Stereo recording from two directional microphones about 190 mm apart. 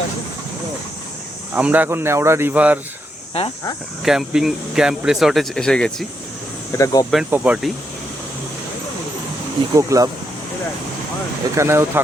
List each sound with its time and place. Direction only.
1.5 s speech: 10° right (ahead or behind)
4.0 s speech: centre (ahead or behind)
6.7 s speech: 15° left (ahead or behind)
7.1 s speech: 5° right (ahead or behind)
9.7 s speech: 15° right (ahead or behind)
11.5 s speech: 15° right (ahead or behind)